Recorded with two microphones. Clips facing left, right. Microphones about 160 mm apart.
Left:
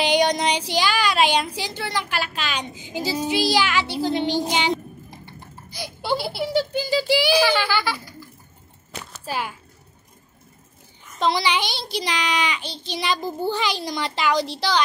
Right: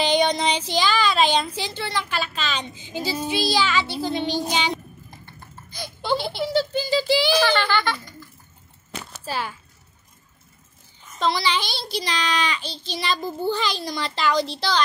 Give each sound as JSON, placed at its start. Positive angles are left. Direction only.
{"t": 0.0, "sound": "a child's voice", "side_deg": 15}
{"t": 9.2, "sound": "speech", "side_deg": 10}
{"t": 11.1, "sound": "speech", "side_deg": 20}